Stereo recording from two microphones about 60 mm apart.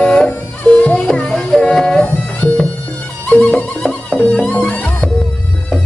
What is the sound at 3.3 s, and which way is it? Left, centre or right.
Music, centre.